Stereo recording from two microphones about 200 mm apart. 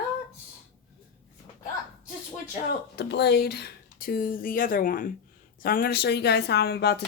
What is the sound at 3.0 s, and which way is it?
Speech, 55° left (ahead or behind).